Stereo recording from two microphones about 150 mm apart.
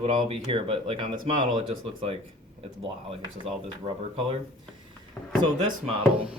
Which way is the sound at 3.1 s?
40° right (ahead or behind).